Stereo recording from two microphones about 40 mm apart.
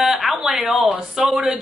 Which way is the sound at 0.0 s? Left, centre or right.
Centre.